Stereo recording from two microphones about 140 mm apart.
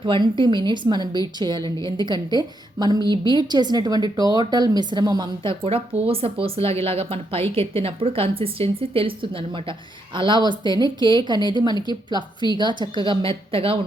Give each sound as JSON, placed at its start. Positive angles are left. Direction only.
{"t": 0.0, "sound": "a woman's voice", "side_deg": -35}